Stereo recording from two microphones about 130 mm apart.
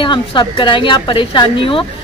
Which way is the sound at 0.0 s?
40° left (ahead or behind).